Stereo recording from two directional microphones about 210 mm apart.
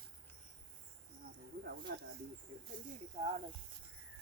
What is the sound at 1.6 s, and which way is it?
Snake, 50° right (ahead or behind).